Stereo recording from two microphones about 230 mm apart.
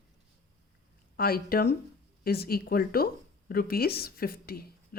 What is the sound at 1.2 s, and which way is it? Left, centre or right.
A woman's voice, left.